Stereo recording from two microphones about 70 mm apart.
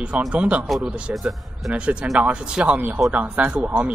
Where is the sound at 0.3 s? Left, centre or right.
Centre.